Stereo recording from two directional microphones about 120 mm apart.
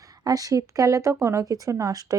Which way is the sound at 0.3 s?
30° right (ahead or behind).